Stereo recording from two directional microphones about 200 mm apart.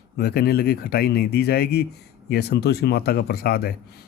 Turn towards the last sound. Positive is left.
turn(degrees=50)  # may be behind; listen again after turning